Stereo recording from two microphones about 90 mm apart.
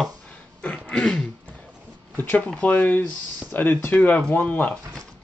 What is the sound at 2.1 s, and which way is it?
Speech, 20° left (ahead or behind).